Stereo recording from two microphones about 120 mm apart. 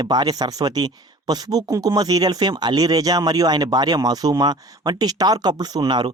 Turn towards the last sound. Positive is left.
turn(degrees=-40)  # may be behind; listen again after turning